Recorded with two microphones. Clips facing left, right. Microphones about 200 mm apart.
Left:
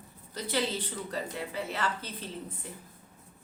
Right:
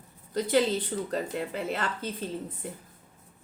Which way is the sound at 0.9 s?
45° right (ahead or behind).